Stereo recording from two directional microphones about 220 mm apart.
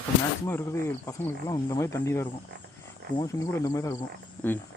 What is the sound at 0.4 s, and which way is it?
Speech, 10° left (ahead or behind).